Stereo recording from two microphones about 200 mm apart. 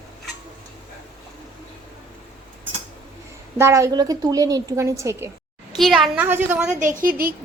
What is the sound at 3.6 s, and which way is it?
A woman's voice, 15° right (ahead or behind).